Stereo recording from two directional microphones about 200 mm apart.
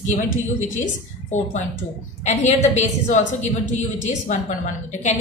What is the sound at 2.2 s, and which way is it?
A woman's voice, 35° left (ahead or behind).